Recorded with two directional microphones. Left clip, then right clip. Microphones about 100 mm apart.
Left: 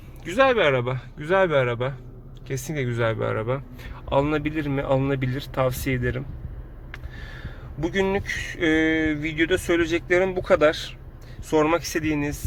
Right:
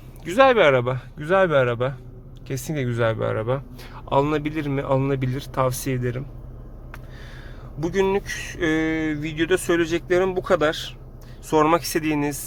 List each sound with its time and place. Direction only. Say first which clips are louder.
0.3 s speech: right 3 dB; 65° right (ahead or behind)
0.9 s a man's voice: right 2 dB; 20° right (ahead or behind)
3.8 s a man's voice: right 1 dB; 30° right (ahead or behind)
4.7 s speech: right 1 dB; 5° right (ahead or behind)
7.8 s speech: right 2 dB; 5° right (ahead or behind)
8.6 s speech: left 2 dB; centre (ahead or behind); by 10.9 s 15° right (ahead or behind)
11.4 s speech: right 2 dB; 30° right (ahead or behind)